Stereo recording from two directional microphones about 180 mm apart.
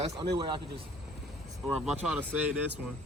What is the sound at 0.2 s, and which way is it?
Speech, 25° right (ahead or behind).